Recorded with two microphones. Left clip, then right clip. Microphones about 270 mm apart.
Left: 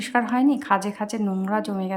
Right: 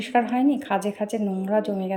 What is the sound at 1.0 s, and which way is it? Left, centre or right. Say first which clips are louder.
Speech: right 1 dB; left.